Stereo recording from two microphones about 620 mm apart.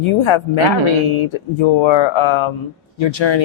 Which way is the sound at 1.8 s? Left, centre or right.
Left.